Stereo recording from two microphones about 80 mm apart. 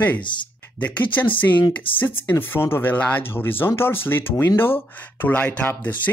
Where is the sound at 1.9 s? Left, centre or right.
Left.